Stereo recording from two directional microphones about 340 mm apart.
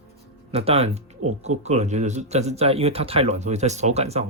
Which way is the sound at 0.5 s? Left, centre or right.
Centre.